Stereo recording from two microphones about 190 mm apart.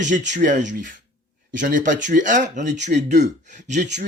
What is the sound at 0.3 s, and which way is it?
Speech, 40° right (ahead or behind).